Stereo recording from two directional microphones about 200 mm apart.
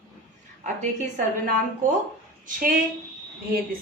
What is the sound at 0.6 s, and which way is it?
Speech, 35° right (ahead or behind).